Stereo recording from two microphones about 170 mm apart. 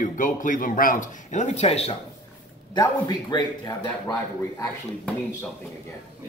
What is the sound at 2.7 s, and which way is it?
Speech, 25° left (ahead or behind).